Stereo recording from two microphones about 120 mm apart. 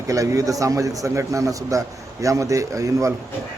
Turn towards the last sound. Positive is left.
turn(degrees=-25)  # may be behind; listen again after turning